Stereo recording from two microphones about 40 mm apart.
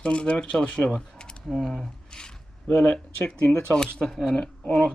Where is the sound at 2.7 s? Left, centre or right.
Left.